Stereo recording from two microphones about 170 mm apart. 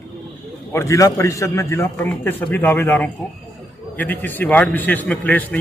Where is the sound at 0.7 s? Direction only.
20° left (ahead or behind).